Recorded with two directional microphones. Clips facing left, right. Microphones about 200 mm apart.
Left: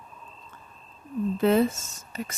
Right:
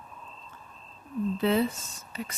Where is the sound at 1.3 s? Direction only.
50° left (ahead or behind).